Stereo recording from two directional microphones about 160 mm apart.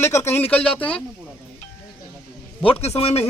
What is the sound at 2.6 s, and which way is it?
Speech, 40° left (ahead or behind).